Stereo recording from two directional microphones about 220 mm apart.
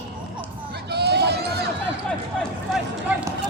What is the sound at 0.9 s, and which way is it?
Run, 50° right (ahead or behind).